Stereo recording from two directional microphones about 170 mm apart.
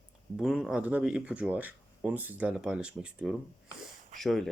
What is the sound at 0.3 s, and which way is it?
Speech, centre (ahead or behind).